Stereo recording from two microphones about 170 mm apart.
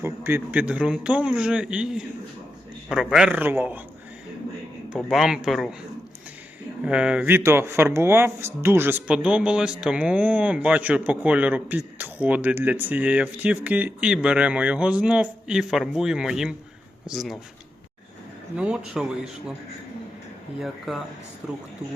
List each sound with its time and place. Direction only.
0.0 s speech: 15° right (ahead or behind)
4.9 s a man's voice: centre (ahead or behind)
6.8 s a man's voice: 5° right (ahead or behind)
18.5 s a man's voice: 5° right (ahead or behind)
20.6 s a man's voice: centre (ahead or behind)